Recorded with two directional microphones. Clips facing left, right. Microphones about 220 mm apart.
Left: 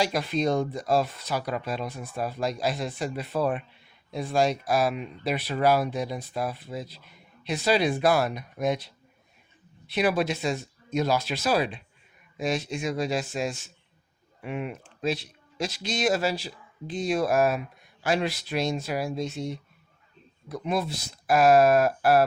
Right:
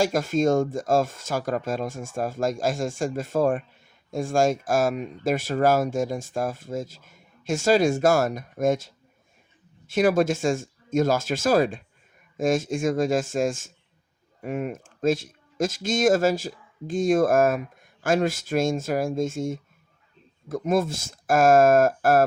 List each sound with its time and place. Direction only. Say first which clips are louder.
0.0 s speech: right 4 dB; 45° right (ahead or behind)